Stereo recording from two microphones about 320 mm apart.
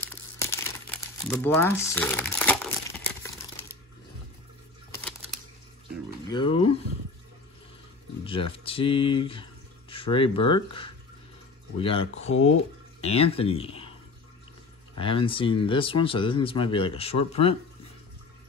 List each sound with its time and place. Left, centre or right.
0.4 s crumpling: centre
1.3 s speech: centre
2.3 s crumpling: centre
6.2 s a sound: centre
8.2 s speech: centre
10.3 s speech: left
11.8 s speech: centre
12.3 s speech: left
13.0 s speech: centre
15.0 s speech: centre